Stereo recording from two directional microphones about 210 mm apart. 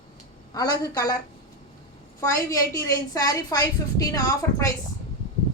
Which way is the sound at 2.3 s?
15° left (ahead or behind).